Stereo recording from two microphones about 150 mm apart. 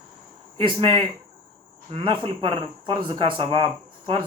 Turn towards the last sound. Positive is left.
turn(degrees=-35)  # may be behind; listen again after turning